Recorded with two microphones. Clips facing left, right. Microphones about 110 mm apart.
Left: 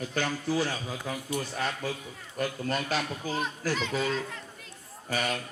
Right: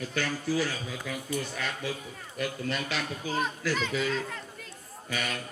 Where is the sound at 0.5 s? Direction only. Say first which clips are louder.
Left 1 dB; 30° left (ahead or behind).